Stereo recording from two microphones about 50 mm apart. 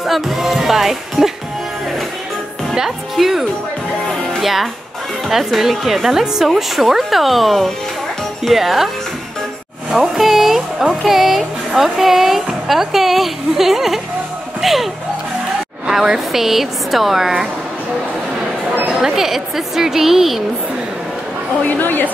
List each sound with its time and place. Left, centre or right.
0.0 s speech: centre
2.7 s speech: centre
14.6 s a sound: centre
15.9 s speech: centre
18.9 s a woman's voice: centre
21.6 s a woman's voice: left